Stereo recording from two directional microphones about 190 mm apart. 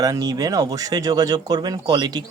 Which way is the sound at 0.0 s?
20° right (ahead or behind).